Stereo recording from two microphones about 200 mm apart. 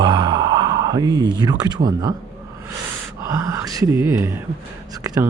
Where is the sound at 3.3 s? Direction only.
15° right (ahead or behind).